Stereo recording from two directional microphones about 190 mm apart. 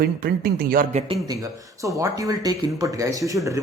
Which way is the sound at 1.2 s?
20° right (ahead or behind).